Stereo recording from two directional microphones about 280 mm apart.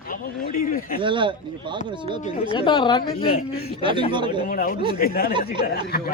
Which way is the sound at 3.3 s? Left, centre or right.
Left.